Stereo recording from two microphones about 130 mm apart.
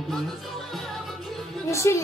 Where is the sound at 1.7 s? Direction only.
20° left (ahead or behind).